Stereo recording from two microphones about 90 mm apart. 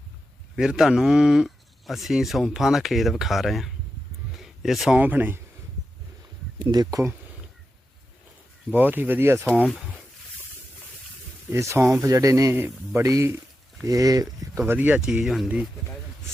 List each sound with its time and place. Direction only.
0.5 s speech: 5° right (ahead or behind)
4.3 s a sound: 5° right (ahead or behind)
4.9 s speech: 20° right (ahead or behind)
6.6 s speech: 60° right (ahead or behind)
8.7 s speech: 20° right (ahead or behind)
11.5 s speech: 35° right (ahead or behind)
12.5 s speech: 25° right (ahead or behind); by 14.6 s 45° right (ahead or behind)
14.7 s speech: 20° right (ahead or behind)
15.0 s speech: 5° right (ahead or behind)